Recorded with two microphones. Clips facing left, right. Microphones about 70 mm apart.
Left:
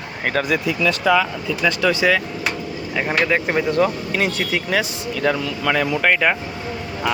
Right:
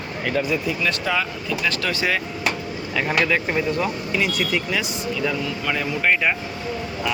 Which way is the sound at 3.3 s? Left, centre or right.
Left.